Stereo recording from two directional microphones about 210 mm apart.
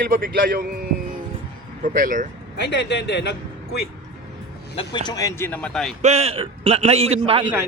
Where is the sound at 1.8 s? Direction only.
40° right (ahead or behind).